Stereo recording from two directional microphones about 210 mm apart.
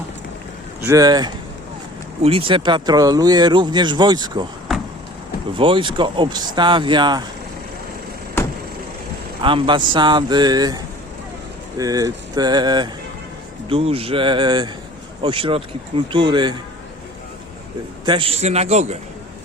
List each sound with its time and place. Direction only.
0.9 s speech: 15° right (ahead or behind)
5.5 s speech: 25° right (ahead or behind)
9.4 s speech: 25° right (ahead or behind)
18.0 s a man's voice: 25° right (ahead or behind)